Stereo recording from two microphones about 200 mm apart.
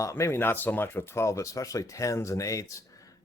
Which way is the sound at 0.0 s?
15° left (ahead or behind).